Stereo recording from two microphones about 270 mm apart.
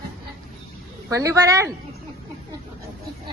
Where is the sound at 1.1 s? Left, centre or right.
Centre.